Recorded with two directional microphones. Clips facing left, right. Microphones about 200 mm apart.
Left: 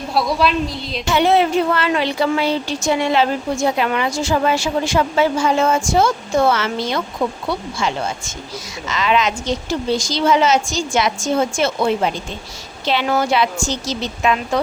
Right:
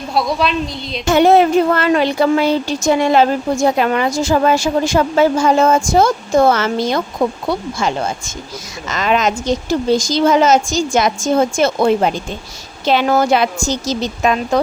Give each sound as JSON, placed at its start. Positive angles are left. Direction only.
{"t": 0.1, "sound": "a woman's voice", "side_deg": 5}
{"t": 1.0, "sound": "speech", "side_deg": -45}